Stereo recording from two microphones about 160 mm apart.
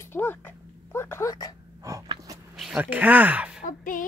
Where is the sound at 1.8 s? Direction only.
20° right (ahead or behind).